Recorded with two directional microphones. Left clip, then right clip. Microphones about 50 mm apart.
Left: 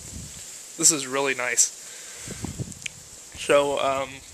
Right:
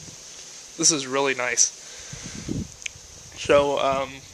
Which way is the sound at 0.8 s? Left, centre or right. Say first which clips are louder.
Right 2 dB; centre.